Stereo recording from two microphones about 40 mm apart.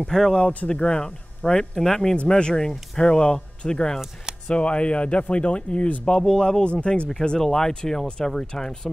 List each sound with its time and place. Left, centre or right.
0.1 s speech: centre
0.7 s speech: left